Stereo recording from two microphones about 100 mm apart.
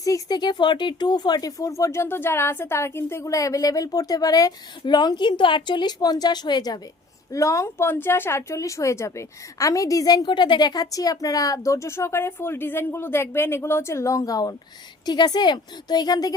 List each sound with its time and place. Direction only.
0.0 s speech: 40° left (ahead or behind)
7.3 s speech: 30° left (ahead or behind)
10.2 s a woman's voice: 50° left (ahead or behind)